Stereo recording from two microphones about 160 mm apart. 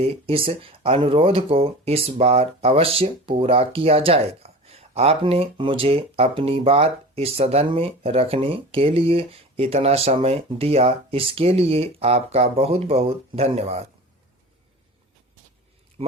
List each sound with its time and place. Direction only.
0.0 s speech: 35° right (ahead or behind)
16.0 s speech: 40° right (ahead or behind)